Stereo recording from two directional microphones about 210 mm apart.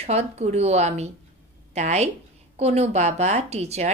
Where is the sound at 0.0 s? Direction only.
30° right (ahead or behind).